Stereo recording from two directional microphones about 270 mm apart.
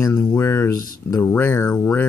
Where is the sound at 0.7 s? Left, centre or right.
Left.